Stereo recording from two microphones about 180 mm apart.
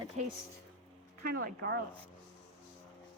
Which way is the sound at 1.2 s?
60° right (ahead or behind).